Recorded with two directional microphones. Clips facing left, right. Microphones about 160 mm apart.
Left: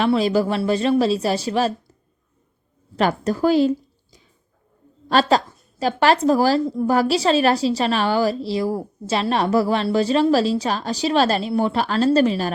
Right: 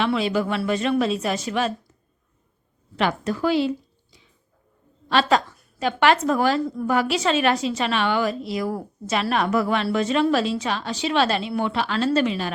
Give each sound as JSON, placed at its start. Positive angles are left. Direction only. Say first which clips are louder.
{"t": 0.0, "sound": "a woman's voice", "louder": "left 4 dB", "side_deg": 40}
{"t": 2.9, "sound": "a woman's voice", "louder": "left 3 dB", "side_deg": 40}